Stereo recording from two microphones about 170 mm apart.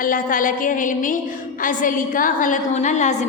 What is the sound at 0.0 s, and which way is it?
A woman's voice, 55° left (ahead or behind).